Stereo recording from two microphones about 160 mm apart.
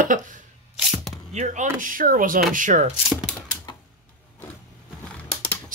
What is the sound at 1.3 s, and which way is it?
Speech, 45° right (ahead or behind).